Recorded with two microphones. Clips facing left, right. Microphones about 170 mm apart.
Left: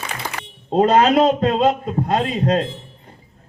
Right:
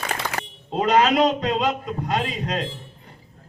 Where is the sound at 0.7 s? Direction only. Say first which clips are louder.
Left 5 dB; 45° left (ahead or behind).